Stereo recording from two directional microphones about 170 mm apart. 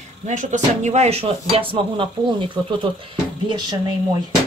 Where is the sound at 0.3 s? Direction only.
45° right (ahead or behind); by 3.7 s 25° right (ahead or behind).